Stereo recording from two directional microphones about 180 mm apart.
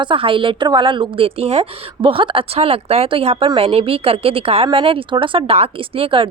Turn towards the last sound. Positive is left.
turn(degrees=-30)  # may be behind; listen again after turning